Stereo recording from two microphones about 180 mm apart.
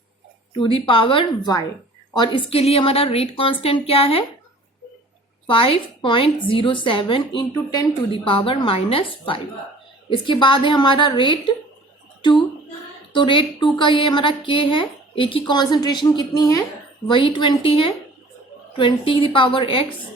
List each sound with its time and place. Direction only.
0.5 s a woman's voice: 30° left (ahead or behind)
5.5 s a woman's voice: 30° left (ahead or behind)
13.1 s a woman's voice: 25° left (ahead or behind)